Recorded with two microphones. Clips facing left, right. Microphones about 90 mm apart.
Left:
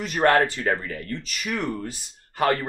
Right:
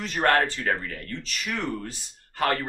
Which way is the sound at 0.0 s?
10° left (ahead or behind).